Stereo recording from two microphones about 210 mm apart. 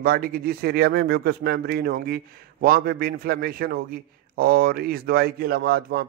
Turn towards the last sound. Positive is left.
turn(degrees=-45)  # may be behind; listen again after turning